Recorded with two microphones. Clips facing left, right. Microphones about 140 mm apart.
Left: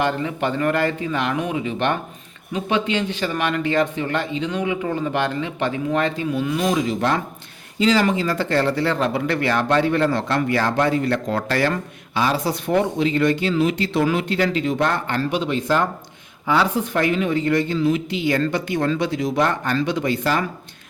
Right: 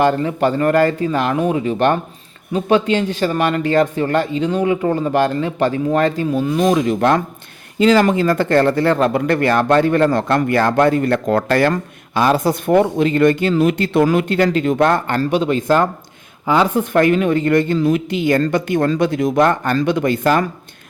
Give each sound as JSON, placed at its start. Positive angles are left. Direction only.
{"t": 0.0, "sound": "speech", "side_deg": -40}